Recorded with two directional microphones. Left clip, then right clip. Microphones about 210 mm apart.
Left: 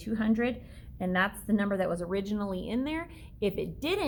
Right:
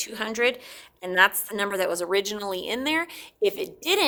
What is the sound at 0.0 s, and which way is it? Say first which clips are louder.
A woman's voice: right 6 dB; 35° right (ahead or behind).